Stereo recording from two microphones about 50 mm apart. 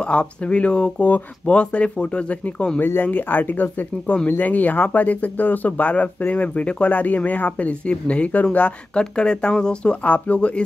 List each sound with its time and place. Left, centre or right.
0.0 s speech: left
2.8 s speech: left